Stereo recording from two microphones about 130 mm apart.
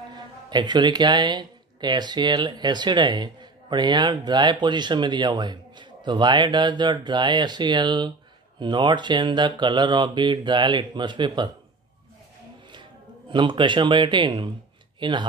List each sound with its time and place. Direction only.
0.1 s speech: 35° right (ahead or behind)
13.3 s speech: 40° right (ahead or behind)